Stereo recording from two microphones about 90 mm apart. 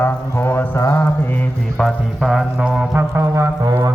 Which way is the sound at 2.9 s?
30° right (ahead or behind).